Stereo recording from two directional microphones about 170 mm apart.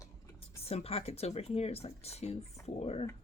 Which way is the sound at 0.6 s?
35° left (ahead or behind).